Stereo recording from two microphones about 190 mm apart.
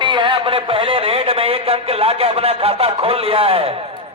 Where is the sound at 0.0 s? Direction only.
25° right (ahead or behind).